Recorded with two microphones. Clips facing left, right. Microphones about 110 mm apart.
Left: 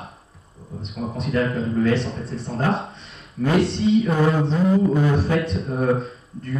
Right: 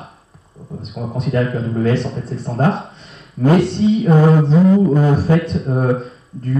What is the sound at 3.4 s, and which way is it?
Speech, 35° right (ahead or behind).